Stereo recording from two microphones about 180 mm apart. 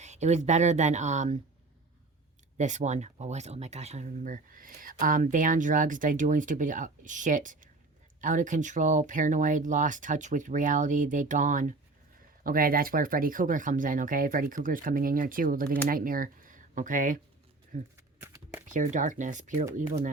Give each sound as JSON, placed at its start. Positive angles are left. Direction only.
{"t": 0.0, "sound": "speech", "side_deg": -40}
{"t": 2.6, "sound": "speech", "side_deg": -40}